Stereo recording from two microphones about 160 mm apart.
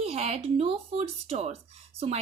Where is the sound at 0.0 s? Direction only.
40° right (ahead or behind).